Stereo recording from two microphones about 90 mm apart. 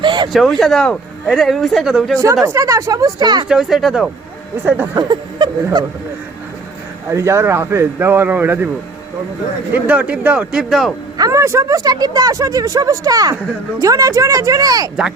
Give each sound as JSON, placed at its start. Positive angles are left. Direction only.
{"t": 0.0, "sound": "a sound", "side_deg": -60}
{"t": 0.3, "sound": "speech", "side_deg": 0}
{"t": 2.4, "sound": "speech", "side_deg": -35}
{"t": 3.5, "sound": "speech", "side_deg": -5}
{"t": 4.9, "sound": "speech", "side_deg": -55}
{"t": 7.1, "sound": "speech", "side_deg": -30}
{"t": 9.7, "sound": "speech", "side_deg": -15}
{"t": 10.5, "sound": "speech", "side_deg": -5}
{"t": 11.2, "sound": "speech", "side_deg": -35}
{"t": 11.8, "sound": "speech", "side_deg": -50}